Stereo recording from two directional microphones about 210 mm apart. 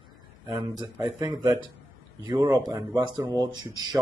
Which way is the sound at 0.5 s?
20° right (ahead or behind).